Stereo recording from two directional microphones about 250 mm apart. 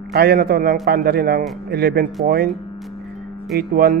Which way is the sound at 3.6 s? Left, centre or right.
Right.